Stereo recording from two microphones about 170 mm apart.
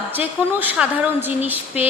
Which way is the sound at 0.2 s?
10° right (ahead or behind).